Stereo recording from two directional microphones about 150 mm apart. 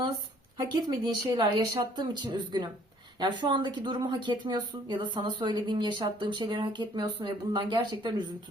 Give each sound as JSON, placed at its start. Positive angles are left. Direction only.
{"t": 1.0, "sound": "speech", "side_deg": -30}